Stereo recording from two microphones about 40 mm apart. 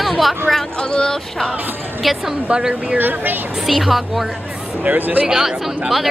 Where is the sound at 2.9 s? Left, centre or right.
Right.